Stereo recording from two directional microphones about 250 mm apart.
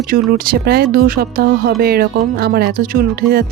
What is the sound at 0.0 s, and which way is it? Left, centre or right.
Speech, right.